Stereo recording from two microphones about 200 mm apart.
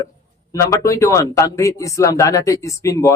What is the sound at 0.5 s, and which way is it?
A man's voice, 15° left (ahead or behind).